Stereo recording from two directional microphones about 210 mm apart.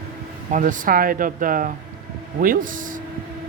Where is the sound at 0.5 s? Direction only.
40° right (ahead or behind).